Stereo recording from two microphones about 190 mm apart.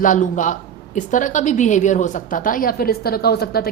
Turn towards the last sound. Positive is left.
turn(degrees=55)  # may be behind; listen again after turning